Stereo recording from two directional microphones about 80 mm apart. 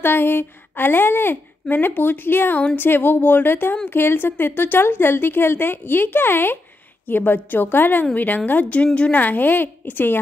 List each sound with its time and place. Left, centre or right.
0.0 s a woman's voice: left